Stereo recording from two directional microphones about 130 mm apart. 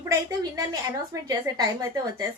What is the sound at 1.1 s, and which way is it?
Speech, 25° right (ahead or behind).